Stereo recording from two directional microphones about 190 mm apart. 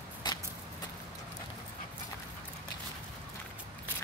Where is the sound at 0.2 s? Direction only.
25° left (ahead or behind).